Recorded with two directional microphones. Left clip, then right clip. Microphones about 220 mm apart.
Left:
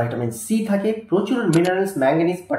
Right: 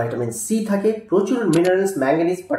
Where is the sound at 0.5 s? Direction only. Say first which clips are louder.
Right 1 dB; 10° right (ahead or behind).